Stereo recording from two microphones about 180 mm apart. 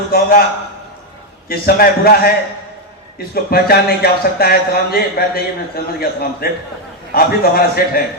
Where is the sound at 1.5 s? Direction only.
55° left (ahead or behind).